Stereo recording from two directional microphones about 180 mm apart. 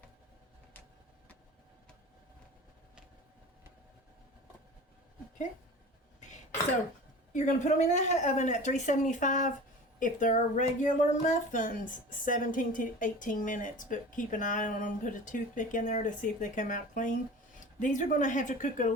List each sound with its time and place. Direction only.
7.3 s speech: 45° left (ahead or behind)